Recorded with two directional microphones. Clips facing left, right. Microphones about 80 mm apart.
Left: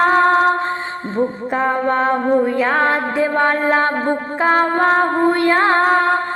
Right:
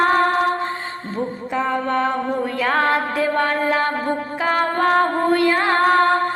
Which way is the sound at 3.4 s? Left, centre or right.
Left.